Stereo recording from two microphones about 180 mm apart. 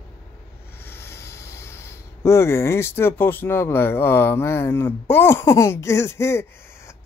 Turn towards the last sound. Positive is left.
turn(degrees=15)  # may be behind; listen again after turning